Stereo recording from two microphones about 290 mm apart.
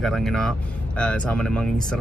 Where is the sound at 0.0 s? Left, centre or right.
Centre.